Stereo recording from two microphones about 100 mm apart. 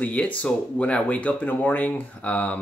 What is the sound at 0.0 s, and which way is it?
Speech, 10° left (ahead or behind).